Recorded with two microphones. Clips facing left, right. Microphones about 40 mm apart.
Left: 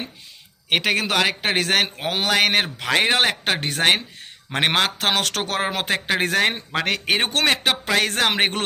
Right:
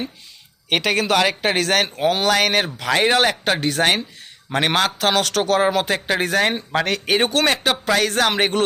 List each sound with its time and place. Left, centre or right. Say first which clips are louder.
0.7 s a man's voice: right 2 dB; centre
6.7 s a man's voice: right 3 dB; centre
7.2 s a man's voice: right 2 dB; left